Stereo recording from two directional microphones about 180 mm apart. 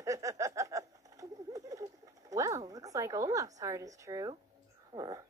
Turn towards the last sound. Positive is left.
turn(degrees=-20)  # may be behind; listen again after turning